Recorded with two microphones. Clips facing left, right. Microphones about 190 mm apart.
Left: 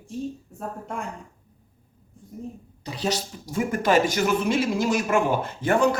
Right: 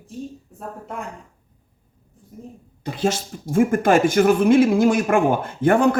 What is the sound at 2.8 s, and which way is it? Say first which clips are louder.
Speech: right 5 dB; 50° right (ahead or behind).